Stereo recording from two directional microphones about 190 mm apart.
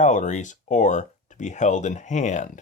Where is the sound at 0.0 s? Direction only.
40° left (ahead or behind).